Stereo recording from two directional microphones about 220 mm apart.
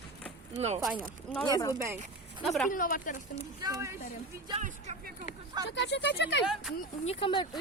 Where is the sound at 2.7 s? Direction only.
40° left (ahead or behind).